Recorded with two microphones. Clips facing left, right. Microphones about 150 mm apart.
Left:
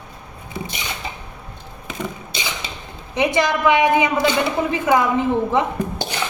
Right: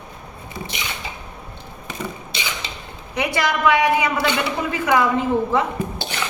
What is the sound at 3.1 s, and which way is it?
A woman's voice, 20° left (ahead or behind).